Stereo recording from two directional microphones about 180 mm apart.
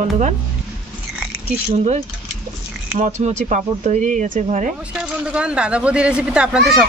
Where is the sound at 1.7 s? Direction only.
35° right (ahead or behind).